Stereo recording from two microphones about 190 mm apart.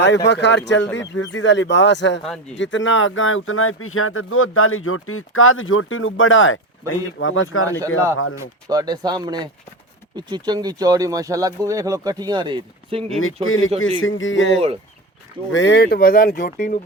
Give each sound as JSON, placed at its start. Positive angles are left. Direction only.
{"t": 0.0, "sound": "speech", "side_deg": 65}
{"t": 2.6, "sound": "speech", "side_deg": 80}
{"t": 8.4, "sound": "speech", "side_deg": -20}
{"t": 13.1, "sound": "speech", "side_deg": 90}
{"t": 15.5, "sound": "speech", "side_deg": 65}